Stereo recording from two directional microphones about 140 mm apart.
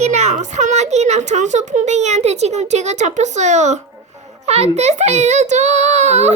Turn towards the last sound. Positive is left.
turn(degrees=-55)  # may be behind; listen again after turning